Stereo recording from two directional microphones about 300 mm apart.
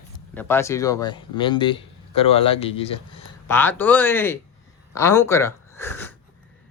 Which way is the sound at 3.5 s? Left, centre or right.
Centre.